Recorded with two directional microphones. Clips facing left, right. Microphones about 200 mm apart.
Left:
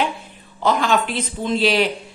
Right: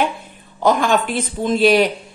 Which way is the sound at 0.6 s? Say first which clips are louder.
Right 3 dB; 50° right (ahead or behind).